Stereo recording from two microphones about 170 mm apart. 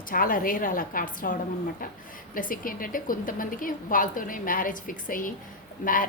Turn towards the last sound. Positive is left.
turn(degrees=55)  # may be behind; listen again after turning